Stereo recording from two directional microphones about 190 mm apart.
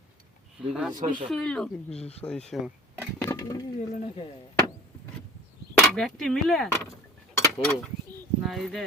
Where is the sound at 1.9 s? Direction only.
35° left (ahead or behind).